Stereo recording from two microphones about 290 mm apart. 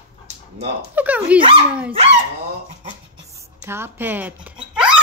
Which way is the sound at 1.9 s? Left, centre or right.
Right.